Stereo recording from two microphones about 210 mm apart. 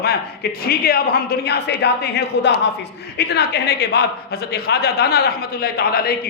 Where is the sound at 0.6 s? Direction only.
45° left (ahead or behind).